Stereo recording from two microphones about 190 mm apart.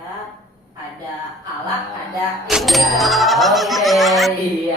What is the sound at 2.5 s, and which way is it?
Fowl, centre (ahead or behind).